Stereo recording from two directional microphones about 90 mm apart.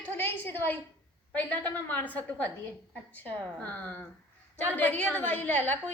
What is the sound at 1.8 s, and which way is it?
A woman's voice, 20° left (ahead or behind).